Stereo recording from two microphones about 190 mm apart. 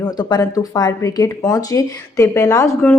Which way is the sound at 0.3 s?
20° left (ahead or behind).